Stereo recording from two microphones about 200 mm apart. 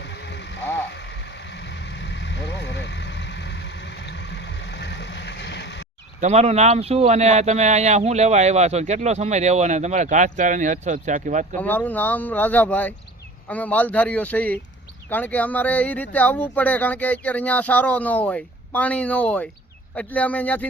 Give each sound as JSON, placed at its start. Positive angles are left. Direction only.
{"t": 0.0, "sound": "a sound", "side_deg": 60}
{"t": 0.9, "sound": "vehicle", "side_deg": 65}
{"t": 6.1, "sound": "speech", "side_deg": -35}
{"t": 11.5, "sound": "speech", "side_deg": 10}